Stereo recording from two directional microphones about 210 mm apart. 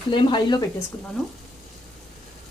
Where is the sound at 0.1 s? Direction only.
20° left (ahead or behind).